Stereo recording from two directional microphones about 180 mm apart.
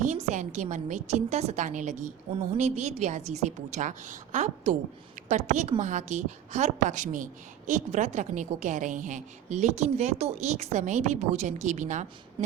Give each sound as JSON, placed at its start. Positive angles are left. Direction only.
{"t": 0.0, "sound": "a woman's voice", "side_deg": -45}